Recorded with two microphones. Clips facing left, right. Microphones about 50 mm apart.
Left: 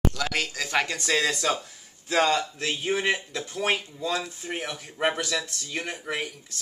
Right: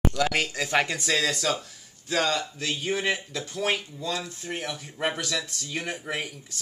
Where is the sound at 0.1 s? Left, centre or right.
Centre.